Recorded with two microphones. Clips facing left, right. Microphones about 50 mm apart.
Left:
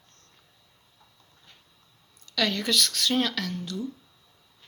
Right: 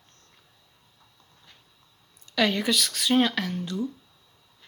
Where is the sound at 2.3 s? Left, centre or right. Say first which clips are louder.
Right 3 dB; centre.